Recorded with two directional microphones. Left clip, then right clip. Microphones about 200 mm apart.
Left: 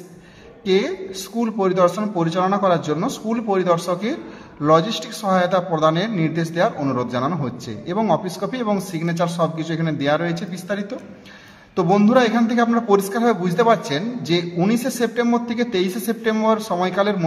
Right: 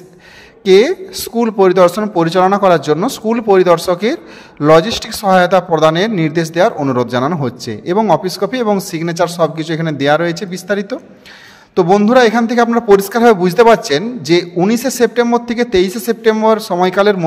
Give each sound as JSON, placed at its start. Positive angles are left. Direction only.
{"t": 0.7, "sound": "a man's voice", "side_deg": -45}